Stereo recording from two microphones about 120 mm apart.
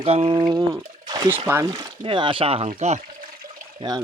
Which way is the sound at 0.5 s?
30° right (ahead or behind).